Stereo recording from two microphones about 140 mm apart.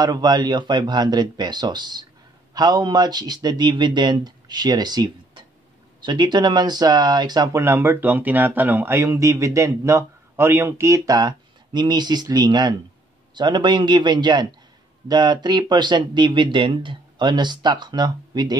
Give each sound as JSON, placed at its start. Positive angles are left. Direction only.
{"t": 0.0, "sound": "speech", "side_deg": -30}